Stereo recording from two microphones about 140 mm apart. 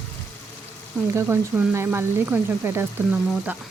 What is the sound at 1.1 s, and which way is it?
Speech, 15° right (ahead or behind).